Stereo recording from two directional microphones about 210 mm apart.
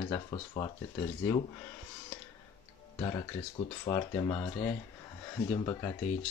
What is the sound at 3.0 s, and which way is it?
Speech, 20° left (ahead or behind).